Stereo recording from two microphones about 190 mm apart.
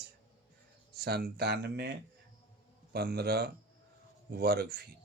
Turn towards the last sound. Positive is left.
turn(degrees=-55)  # may be behind; listen again after turning